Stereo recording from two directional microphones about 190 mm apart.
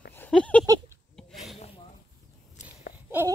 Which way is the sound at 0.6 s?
15° right (ahead or behind).